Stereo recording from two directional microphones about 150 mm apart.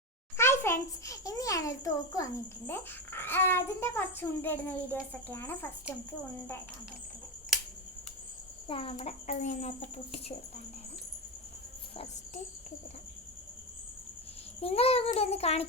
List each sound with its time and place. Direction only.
0.3 s a child's voice: 15° left (ahead or behind)
8.6 s speech: 35° left (ahead or behind)
9.0 s speech: 50° left (ahead or behind)
14.6 s a child's voice: 40° left (ahead or behind)